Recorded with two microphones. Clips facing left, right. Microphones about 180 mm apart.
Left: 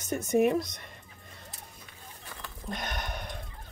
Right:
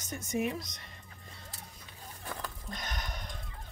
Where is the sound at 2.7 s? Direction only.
60° left (ahead or behind).